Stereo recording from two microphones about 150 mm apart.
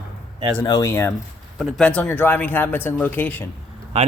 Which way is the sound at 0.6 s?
20° left (ahead or behind).